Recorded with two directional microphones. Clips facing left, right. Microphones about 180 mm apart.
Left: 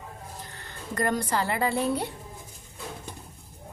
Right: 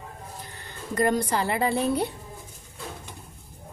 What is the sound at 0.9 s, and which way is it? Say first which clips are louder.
Speech: right 3 dB; 15° right (ahead or behind).